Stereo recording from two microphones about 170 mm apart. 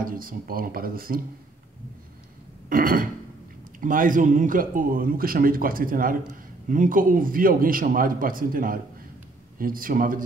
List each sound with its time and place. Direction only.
0.0 s speech: 55° right (ahead or behind)
2.7 s speech: 55° right (ahead or behind)